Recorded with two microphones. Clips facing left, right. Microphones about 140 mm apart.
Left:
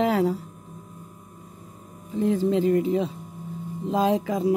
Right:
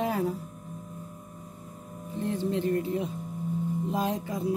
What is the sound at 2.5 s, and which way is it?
Speech, 90° left.